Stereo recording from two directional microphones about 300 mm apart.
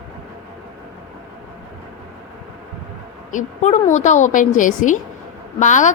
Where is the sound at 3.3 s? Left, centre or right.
Left.